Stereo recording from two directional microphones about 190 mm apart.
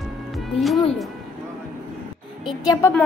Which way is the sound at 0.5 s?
Centre (ahead or behind).